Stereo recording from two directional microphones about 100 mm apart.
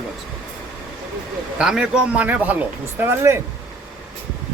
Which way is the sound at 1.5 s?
5° right (ahead or behind).